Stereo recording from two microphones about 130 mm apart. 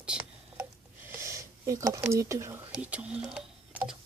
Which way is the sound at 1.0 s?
20° right (ahead or behind).